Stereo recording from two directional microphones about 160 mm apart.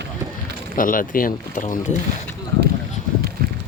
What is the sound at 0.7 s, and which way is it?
Speech, 60° left (ahead or behind).